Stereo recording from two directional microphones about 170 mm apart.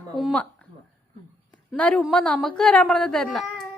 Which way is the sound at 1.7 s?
5° left (ahead or behind).